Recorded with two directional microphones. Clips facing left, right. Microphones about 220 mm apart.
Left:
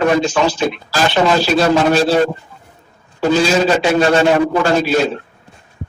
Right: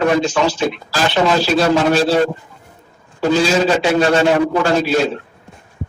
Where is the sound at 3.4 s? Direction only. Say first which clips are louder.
Left 1 dB; 50° left (ahead or behind).